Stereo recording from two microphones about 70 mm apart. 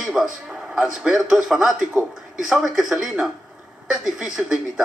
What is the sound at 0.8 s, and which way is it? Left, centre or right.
Speech, centre.